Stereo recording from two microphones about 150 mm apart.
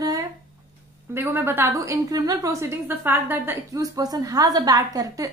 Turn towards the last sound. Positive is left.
turn(degrees=-25)  # may be behind; listen again after turning